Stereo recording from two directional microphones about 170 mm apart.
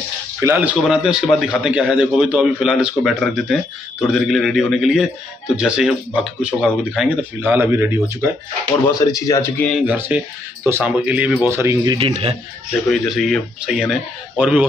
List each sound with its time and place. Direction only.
0.4 s a man's voice: 10° right (ahead or behind)
8.8 s speech: 20° left (ahead or behind)
9.7 s speech: 5° right (ahead or behind)
12.0 s speech: 35° right (ahead or behind)
12.9 s a man's voice: centre (ahead or behind)